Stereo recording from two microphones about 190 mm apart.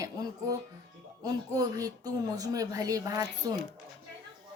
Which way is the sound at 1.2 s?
20° right (ahead or behind).